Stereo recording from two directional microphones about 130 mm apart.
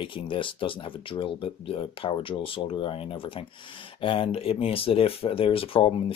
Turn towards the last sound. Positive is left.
turn(degrees=45)  # may be behind; listen again after turning